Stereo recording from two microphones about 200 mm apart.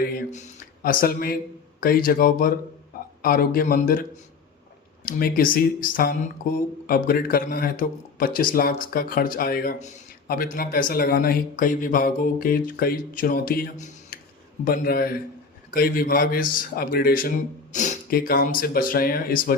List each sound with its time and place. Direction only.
0.0 s speech: 40° left (ahead or behind)
5.0 s speech: 45° left (ahead or behind)